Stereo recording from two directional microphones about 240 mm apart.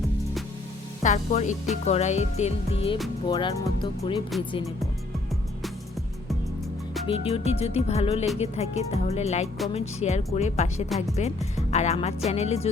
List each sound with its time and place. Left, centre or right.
1.0 s speech: left
7.1 s speech: left
10.8 s speech: centre
11.2 s speech: left